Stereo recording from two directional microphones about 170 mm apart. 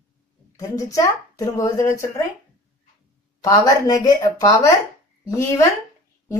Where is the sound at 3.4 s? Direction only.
20° left (ahead or behind).